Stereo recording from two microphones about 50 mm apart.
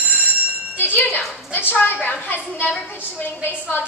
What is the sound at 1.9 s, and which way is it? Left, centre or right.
A woman's voice, left.